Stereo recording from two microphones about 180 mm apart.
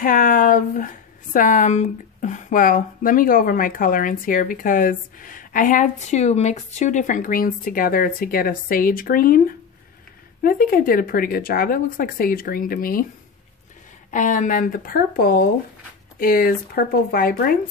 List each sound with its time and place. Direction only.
0.0 s speech: 50° left (ahead or behind)
14.1 s speech: 45° left (ahead or behind)